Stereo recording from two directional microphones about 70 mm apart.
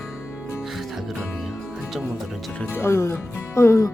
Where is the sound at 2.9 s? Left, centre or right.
Left.